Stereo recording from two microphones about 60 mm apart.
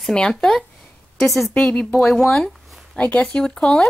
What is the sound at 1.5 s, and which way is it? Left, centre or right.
Speech, centre.